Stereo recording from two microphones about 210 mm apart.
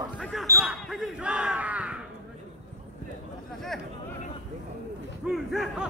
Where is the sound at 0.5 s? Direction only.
10° right (ahead or behind).